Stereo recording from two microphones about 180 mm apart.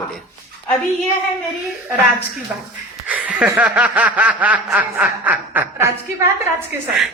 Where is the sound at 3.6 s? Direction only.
10° right (ahead or behind).